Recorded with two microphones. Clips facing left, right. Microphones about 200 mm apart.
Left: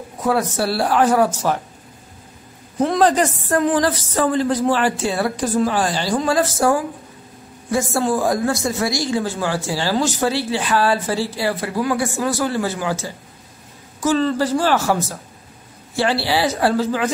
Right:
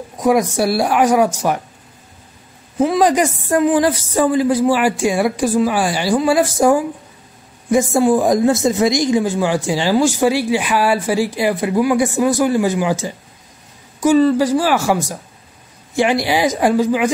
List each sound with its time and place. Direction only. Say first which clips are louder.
0.2 s a woman's voice: right 5 dB; 15° right (ahead or behind)
2.8 s a woman's voice: right 2 dB; 5° right (ahead or behind)